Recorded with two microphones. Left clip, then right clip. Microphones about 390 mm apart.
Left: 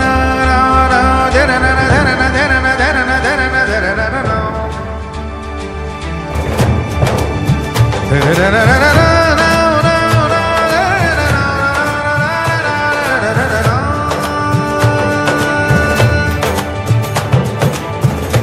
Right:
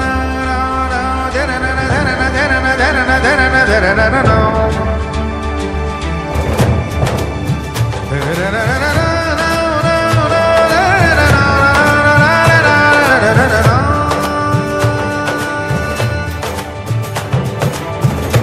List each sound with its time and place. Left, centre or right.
0.0 s music: left; by 4.5 s right
8.1 s music: left; by 13.9 s right
14.0 s music: centre
14.5 s music: centre; by 16.1 s left